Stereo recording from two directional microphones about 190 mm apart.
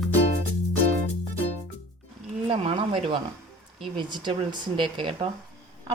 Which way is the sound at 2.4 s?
30° right (ahead or behind).